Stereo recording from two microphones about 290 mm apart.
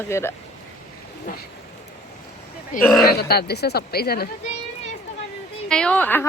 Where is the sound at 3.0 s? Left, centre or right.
Left.